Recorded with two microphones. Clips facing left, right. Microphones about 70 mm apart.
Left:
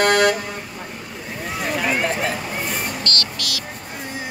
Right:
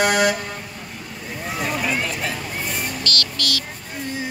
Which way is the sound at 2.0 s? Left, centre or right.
Left.